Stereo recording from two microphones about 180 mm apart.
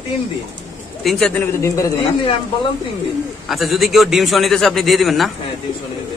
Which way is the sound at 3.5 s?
Centre (ahead or behind).